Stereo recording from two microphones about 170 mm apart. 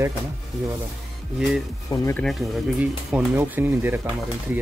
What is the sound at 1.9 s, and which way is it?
Speech, 15° left (ahead or behind).